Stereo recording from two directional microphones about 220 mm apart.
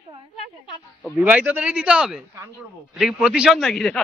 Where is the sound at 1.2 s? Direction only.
10° right (ahead or behind).